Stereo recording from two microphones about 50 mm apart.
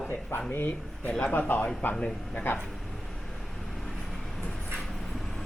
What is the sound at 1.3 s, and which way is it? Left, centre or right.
Speech, left.